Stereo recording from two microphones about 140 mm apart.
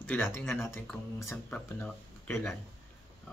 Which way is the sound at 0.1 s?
10° left (ahead or behind).